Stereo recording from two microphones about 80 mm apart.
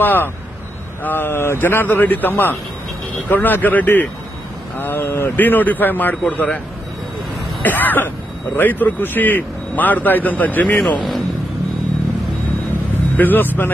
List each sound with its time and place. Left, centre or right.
0.0 s a man's voice: left
7.6 s a man's voice: left
13.1 s speech: left